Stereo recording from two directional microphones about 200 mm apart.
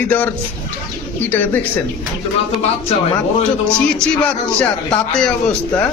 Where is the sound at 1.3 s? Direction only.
10° left (ahead or behind).